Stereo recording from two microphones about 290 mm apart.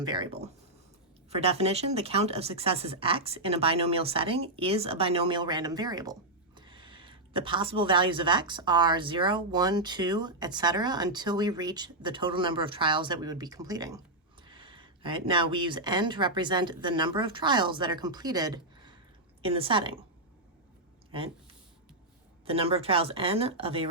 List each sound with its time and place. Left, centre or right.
0.0 s speech: centre
22.4 s speech: centre